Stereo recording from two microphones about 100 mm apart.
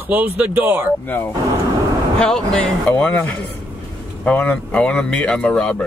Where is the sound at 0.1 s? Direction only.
20° right (ahead or behind).